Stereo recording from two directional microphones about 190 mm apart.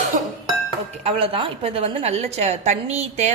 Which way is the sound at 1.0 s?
30° right (ahead or behind).